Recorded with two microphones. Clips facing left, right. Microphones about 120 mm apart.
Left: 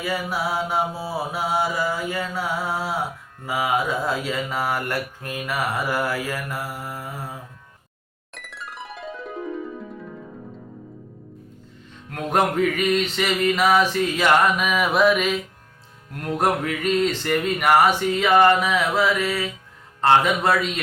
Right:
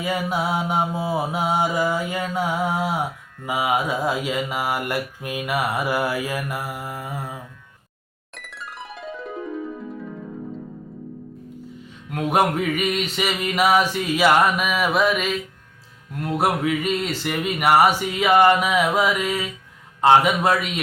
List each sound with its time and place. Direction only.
0.0 s mantra: 20° right (ahead or behind)
8.4 s music: centre (ahead or behind)
12.1 s mantra: 10° right (ahead or behind)